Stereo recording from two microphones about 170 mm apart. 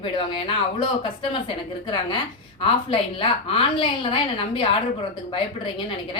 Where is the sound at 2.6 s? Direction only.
30° left (ahead or behind).